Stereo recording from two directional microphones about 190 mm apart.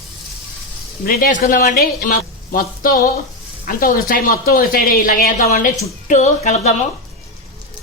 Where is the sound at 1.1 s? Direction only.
50° left (ahead or behind).